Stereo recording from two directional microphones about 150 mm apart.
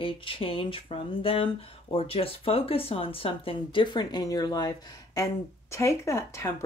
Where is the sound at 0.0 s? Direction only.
35° left (ahead or behind).